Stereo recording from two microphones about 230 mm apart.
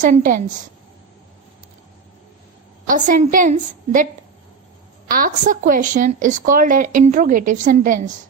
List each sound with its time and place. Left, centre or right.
0.0 s a woman's voice: right
2.8 s a woman's voice: right